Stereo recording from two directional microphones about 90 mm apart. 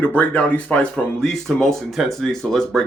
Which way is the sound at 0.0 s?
15° left (ahead or behind).